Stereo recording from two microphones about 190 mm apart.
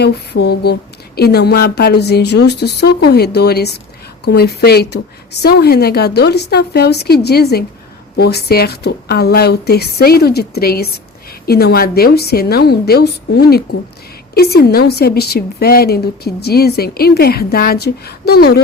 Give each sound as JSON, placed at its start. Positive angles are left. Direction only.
{"t": 0.0, "sound": "a woman's voice", "side_deg": 60}